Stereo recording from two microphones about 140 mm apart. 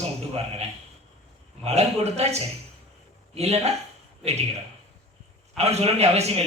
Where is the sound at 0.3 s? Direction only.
50° right (ahead or behind).